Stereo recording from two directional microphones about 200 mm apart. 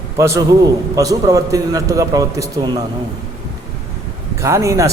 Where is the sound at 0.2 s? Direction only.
15° right (ahead or behind).